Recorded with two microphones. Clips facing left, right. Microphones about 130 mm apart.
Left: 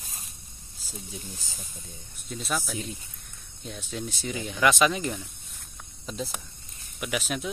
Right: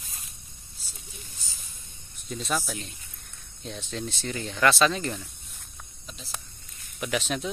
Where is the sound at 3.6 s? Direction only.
5° left (ahead or behind).